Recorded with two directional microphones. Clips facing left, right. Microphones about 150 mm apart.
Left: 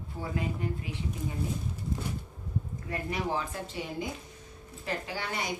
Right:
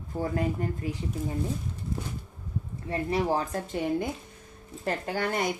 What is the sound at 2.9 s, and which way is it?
Speech, 35° right (ahead or behind).